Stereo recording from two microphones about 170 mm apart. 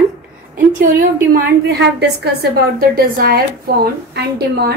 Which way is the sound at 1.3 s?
75° right (ahead or behind).